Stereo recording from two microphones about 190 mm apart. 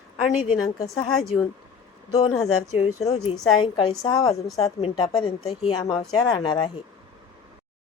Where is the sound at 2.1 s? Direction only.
35° left (ahead or behind).